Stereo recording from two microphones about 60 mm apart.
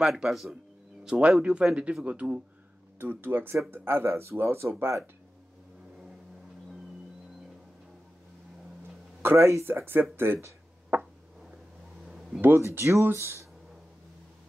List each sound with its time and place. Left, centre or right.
0.0 s speech: centre
1.0 s speech: centre
3.0 s speech: right
9.2 s speech: right
10.1 s a sound: right
12.4 s speech: right
13.0 s speech: right